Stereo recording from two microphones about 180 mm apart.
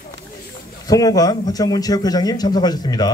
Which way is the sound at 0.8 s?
20° left (ahead or behind).